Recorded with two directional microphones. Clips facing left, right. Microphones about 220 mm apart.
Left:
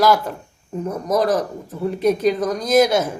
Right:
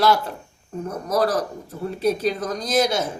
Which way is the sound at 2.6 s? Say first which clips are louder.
Left 6 dB; 55° left (ahead or behind).